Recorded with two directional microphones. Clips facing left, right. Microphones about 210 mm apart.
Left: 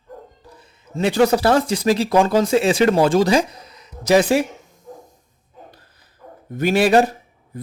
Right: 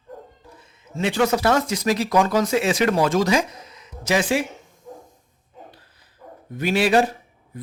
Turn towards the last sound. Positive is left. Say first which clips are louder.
# left 4 dB
turn(degrees=45)  # may be behind; listen again after turning